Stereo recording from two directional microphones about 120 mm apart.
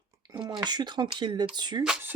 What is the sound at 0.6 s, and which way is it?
Speech, 35° right (ahead or behind).